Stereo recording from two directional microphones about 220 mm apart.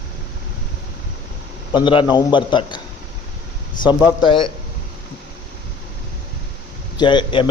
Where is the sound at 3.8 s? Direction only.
20° left (ahead or behind).